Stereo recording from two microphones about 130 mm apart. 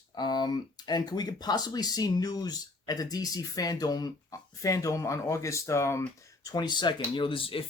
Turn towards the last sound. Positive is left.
turn(degrees=40)  # may be behind; listen again after turning